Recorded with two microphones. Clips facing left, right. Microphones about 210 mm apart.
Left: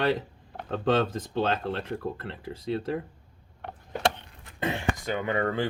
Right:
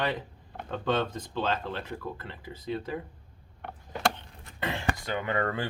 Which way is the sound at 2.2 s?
65° left (ahead or behind).